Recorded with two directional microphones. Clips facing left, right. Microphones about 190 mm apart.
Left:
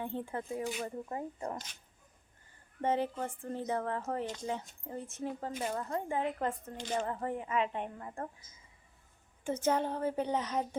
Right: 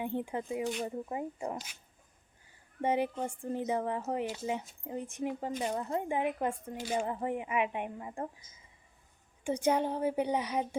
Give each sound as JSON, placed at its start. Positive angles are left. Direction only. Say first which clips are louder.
{"t": 0.0, "sound": "speech", "louder": "right 3 dB", "side_deg": -15}
{"t": 0.6, "sound": "speech", "louder": "right 3 dB", "side_deg": 5}
{"t": 0.9, "sound": "speech", "louder": "right 2 dB", "side_deg": -10}
{"t": 9.4, "sound": "speech", "louder": "right 2 dB", "side_deg": -15}